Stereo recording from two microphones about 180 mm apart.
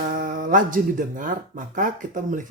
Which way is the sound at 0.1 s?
45° right (ahead or behind).